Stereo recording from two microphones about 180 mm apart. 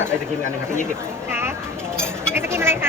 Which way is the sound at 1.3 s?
15° right (ahead or behind).